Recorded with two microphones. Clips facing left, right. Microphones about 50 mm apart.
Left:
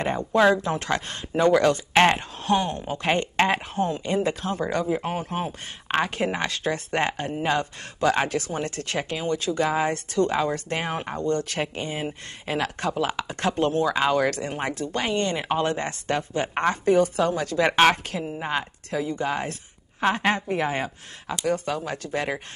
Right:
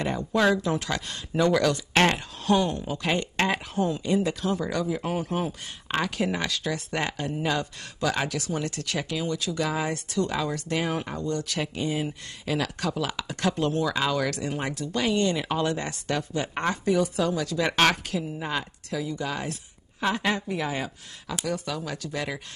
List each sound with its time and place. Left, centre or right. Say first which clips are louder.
0.0 s speech: left 4 dB; left